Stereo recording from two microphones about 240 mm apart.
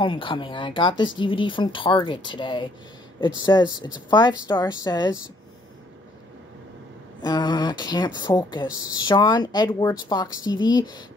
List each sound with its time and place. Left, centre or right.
0.0 s speech: left
7.2 s speech: centre